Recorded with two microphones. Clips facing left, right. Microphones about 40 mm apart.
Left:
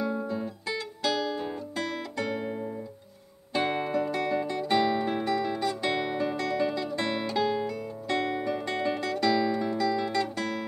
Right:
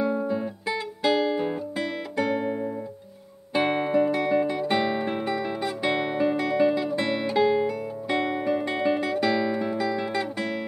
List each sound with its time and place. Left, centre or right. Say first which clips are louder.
0.0 s music: right 5 dB; centre